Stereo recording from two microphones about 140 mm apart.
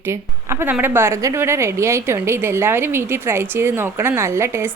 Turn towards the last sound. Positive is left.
turn(degrees=-20)  # may be behind; listen again after turning